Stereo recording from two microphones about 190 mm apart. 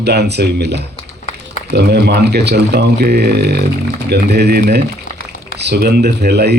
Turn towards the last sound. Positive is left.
turn(degrees=-60)  # may be behind; listen again after turning